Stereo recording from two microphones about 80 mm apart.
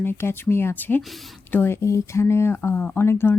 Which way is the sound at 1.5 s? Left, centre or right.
Left.